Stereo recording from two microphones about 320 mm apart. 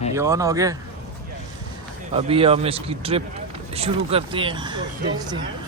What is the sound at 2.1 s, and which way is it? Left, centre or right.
Speech, centre.